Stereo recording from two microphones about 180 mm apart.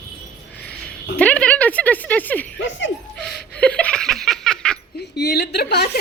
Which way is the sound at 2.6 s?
90° left.